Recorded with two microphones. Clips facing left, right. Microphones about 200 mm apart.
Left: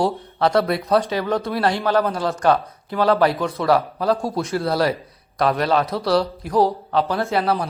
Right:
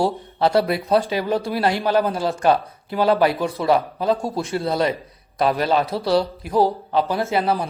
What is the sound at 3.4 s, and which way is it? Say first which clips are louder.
Speech: even; centre (ahead or behind).